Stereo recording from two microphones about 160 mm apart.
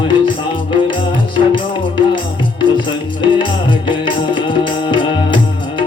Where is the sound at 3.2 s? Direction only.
30° left (ahead or behind).